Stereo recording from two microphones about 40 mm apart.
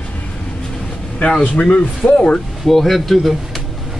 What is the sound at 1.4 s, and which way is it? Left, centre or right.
Speech, left.